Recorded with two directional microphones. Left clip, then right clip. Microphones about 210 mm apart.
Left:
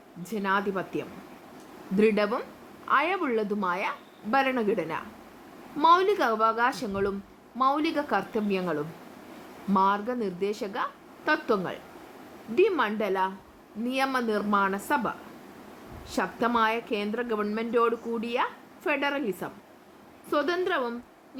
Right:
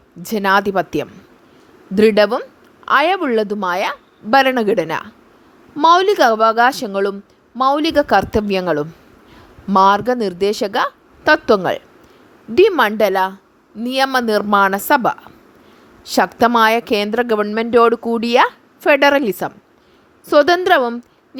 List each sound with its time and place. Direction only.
0.2 s a woman's voice: 50° right (ahead or behind)